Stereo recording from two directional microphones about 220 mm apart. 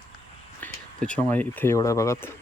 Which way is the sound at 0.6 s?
5° left (ahead or behind).